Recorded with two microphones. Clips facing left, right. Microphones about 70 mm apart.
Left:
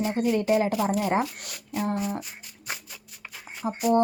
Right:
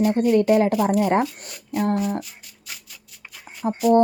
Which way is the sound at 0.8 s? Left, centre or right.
Centre.